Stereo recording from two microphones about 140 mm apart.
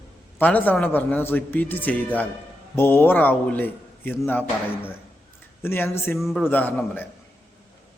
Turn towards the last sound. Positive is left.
turn(degrees=10)  # may be behind; listen again after turning